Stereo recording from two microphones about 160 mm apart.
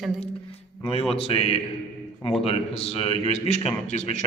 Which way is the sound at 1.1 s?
40° left (ahead or behind).